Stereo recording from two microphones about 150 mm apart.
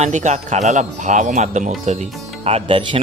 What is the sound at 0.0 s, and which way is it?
Speech, 50° right (ahead or behind).